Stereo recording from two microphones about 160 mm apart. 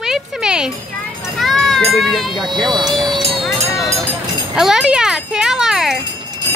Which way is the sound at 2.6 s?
Centre (ahead or behind).